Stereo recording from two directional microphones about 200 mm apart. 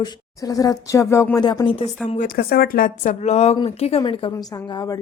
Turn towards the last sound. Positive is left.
turn(degrees=20)  # may be behind; listen again after turning